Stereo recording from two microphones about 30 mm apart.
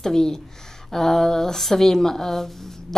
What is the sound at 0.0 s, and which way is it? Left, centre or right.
Speech, centre.